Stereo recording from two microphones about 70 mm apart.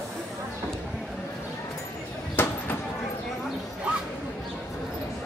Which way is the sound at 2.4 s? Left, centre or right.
Left.